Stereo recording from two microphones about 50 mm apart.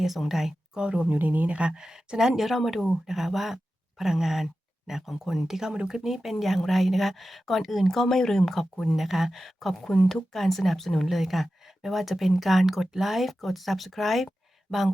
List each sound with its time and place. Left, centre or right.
0.0 s speech: centre
0.8 s speech: centre
1.0 s speech: right
1.7 s speech: centre
5.5 s speech: centre